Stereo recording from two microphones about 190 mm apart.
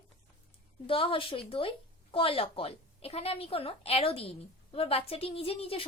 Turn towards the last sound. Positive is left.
turn(degrees=30)  # may be behind; listen again after turning